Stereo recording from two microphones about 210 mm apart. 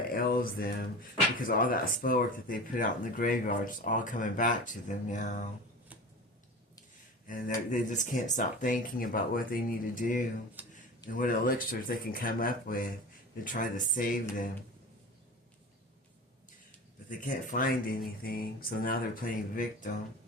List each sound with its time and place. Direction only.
0.1 s speech: 45° left (ahead or behind)
7.3 s speech: 40° left (ahead or behind)
10.6 s speech: 10° right (ahead or behind)
11.1 s speech: 40° left (ahead or behind)
17.1 s speech: 40° left (ahead or behind)